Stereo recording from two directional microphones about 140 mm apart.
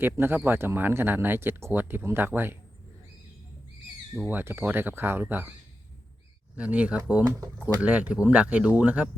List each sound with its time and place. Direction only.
0.0 s speech: 15° right (ahead or behind)
4.3 s speech: 15° right (ahead or behind)
6.6 s speech: 10° right (ahead or behind)
7.4 s speech: 25° right (ahead or behind)
7.8 s speech: 10° right (ahead or behind)